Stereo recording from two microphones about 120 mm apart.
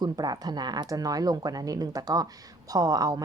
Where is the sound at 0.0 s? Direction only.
35° right (ahead or behind).